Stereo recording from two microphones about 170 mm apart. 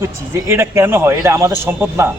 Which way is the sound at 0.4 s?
15° right (ahead or behind).